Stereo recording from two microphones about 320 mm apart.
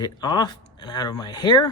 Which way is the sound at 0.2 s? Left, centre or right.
Centre.